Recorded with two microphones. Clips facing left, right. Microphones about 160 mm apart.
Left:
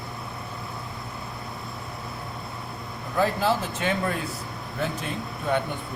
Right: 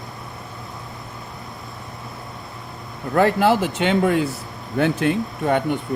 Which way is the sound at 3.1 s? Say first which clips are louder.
Right 7 dB; 75° right (ahead or behind).